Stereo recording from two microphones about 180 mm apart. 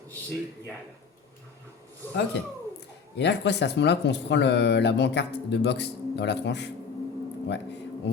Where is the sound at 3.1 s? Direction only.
70° left (ahead or behind).